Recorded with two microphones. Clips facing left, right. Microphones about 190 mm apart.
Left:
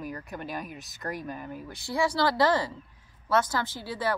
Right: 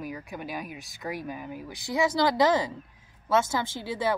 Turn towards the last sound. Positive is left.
turn(degrees=-20)  # may be behind; listen again after turning